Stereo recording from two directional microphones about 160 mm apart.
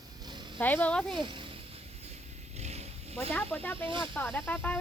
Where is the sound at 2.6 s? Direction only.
40° right (ahead or behind).